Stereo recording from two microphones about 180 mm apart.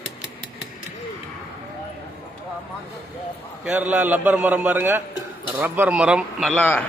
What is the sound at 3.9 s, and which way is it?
A man's voice, 10° right (ahead or behind).